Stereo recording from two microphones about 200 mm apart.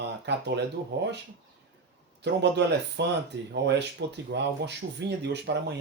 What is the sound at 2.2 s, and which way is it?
Speech, 60° right (ahead or behind).